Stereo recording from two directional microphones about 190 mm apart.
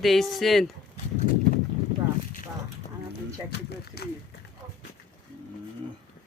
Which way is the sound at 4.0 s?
55° left (ahead or behind).